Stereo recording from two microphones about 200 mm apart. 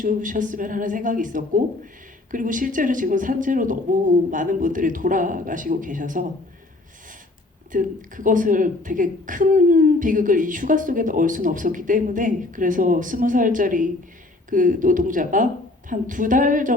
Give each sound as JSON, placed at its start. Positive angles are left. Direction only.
{"t": 0.0, "sound": "speech", "side_deg": -40}
{"t": 7.7, "sound": "speech", "side_deg": -40}